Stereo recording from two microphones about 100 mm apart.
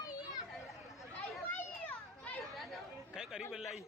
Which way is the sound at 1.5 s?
15° left (ahead or behind).